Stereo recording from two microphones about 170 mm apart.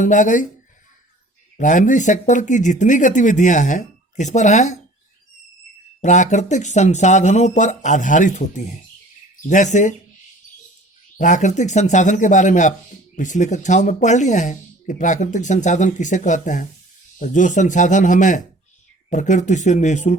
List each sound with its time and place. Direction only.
0.0 s speech: 50° left (ahead or behind)
1.5 s speech: 50° left (ahead or behind)
6.0 s speech: 45° left (ahead or behind)
11.2 s speech: 45° left (ahead or behind)